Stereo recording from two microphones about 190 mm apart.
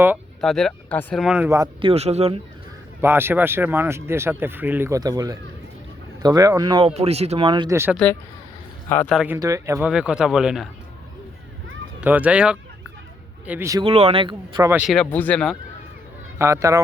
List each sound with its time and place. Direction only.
0.4 s speech: 5° left (ahead or behind)
1.5 s speech: 20° right (ahead or behind)
1.9 s speech: 35° right (ahead or behind)
3.0 s speech: 10° right (ahead or behind)
6.9 s speech: 35° right (ahead or behind)
8.0 s speech: 5° left (ahead or behind)
9.2 s speech: 15° right (ahead or behind)
9.9 s speech: 5° right (ahead or behind)
11.9 s speech: 10° right (ahead or behind)
13.8 s speech: 30° right (ahead or behind)
14.7 s speech: 5° right (ahead or behind)
14.9 s speech: 10° left (ahead or behind)
16.4 s speech: 15° right (ahead or behind)